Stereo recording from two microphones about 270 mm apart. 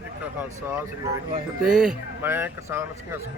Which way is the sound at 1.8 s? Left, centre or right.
Centre.